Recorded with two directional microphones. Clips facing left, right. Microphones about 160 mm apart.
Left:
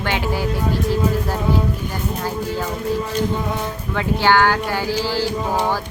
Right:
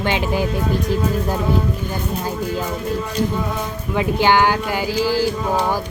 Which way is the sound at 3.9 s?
15° right (ahead or behind).